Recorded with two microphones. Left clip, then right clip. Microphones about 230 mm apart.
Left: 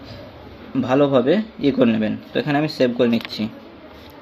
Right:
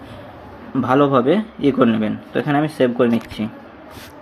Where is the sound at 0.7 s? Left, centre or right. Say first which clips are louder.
Right 2 dB; centre.